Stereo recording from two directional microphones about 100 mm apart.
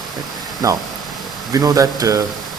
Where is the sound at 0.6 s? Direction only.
35° right (ahead or behind).